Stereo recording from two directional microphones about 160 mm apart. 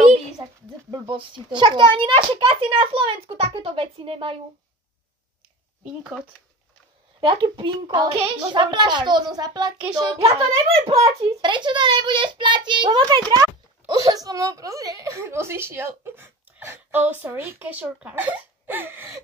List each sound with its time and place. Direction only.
1.0 s a child's voice: 30° right (ahead or behind)
7.2 s a child's voice: 30° right (ahead or behind); by 19.1 s 15° right (ahead or behind)